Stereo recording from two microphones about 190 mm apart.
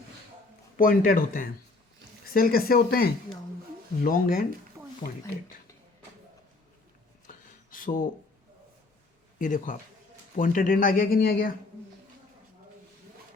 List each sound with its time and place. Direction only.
0.8 s speech: 50° left (ahead or behind)
7.3 s a sound: 45° left (ahead or behind)
9.4 s speech: 40° left (ahead or behind)